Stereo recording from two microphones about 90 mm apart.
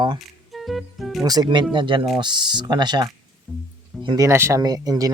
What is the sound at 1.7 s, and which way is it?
Speech, 65° right (ahead or behind).